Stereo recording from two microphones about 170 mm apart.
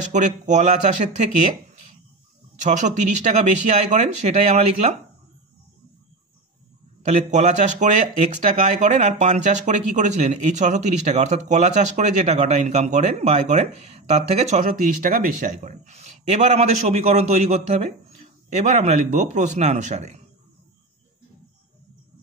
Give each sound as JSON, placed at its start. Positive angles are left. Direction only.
{"t": 0.1, "sound": "speech", "side_deg": -45}
{"t": 7.1, "sound": "speech", "side_deg": -45}